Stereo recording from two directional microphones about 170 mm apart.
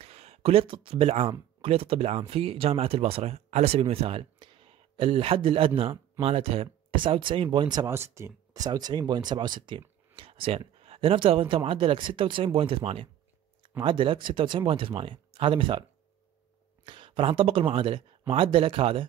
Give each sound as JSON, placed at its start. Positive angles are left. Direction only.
{"t": 0.0, "sound": "a sound", "side_deg": -35}
{"t": 0.8, "sound": "speech", "side_deg": -35}
{"t": 16.8, "sound": "speech", "side_deg": -30}